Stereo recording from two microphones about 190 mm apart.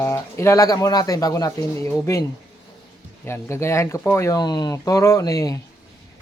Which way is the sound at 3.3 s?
15° left (ahead or behind).